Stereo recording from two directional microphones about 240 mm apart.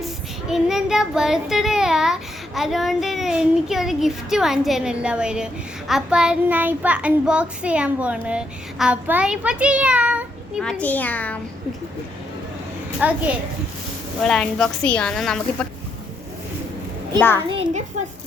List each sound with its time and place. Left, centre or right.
0.0 s child singing: centre
13.0 s a child's voice: centre
14.2 s child singing: centre
17.2 s a child's voice: centre
17.5 s a child's voice: right